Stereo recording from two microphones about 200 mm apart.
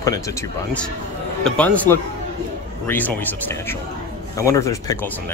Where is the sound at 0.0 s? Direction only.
15° left (ahead or behind).